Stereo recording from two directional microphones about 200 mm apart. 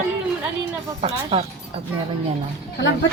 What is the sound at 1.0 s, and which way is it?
Speech, 30° right (ahead or behind).